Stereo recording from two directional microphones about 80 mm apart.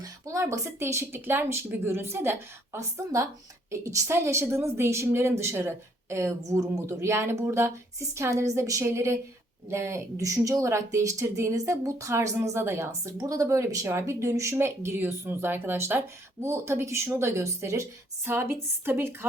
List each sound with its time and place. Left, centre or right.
0.0 s speech: right
2.7 s a woman's voice: right